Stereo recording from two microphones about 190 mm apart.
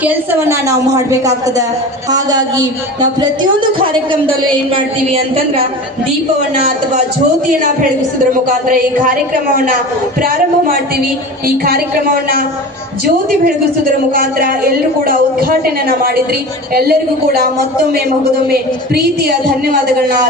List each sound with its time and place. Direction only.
0.0 s a woman's voice: 10° right (ahead or behind)
5.1 s speech: 30° right (ahead or behind)
8.4 s a woman's voice: 50° right (ahead or behind)
14.1 s a woman's voice: 50° right (ahead or behind)